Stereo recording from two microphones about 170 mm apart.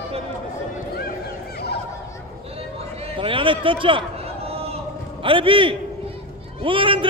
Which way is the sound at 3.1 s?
30° right (ahead or behind).